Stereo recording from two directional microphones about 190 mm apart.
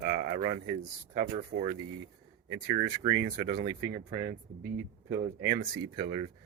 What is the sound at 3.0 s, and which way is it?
Speech, 40° right (ahead or behind).